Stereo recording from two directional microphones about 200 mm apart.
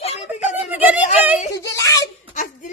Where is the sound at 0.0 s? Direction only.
35° left (ahead or behind).